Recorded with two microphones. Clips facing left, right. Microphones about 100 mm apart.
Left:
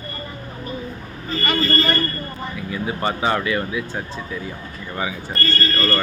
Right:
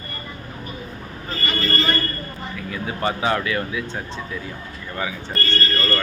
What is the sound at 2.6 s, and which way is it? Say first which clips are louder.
Speech: left 1 dB; 5° left (ahead or behind).